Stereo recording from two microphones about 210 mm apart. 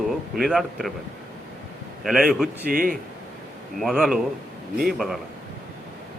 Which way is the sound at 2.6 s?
40° right (ahead or behind).